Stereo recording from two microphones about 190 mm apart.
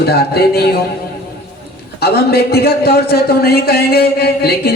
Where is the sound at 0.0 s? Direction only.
55° left (ahead or behind).